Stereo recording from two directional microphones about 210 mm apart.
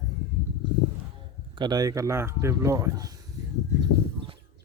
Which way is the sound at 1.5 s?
20° right (ahead or behind).